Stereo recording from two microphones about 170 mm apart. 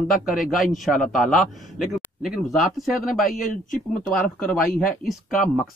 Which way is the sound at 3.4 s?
50° left (ahead or behind).